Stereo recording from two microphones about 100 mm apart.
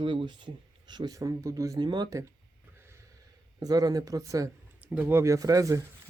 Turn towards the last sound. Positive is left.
turn(degrees=-35)  # may be behind; listen again after turning